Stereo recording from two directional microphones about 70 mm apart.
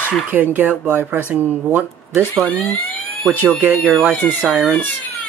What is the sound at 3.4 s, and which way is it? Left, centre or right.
Speech, right.